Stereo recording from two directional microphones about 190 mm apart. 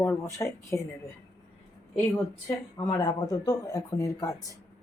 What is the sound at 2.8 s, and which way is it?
Speech, 20° left (ahead or behind).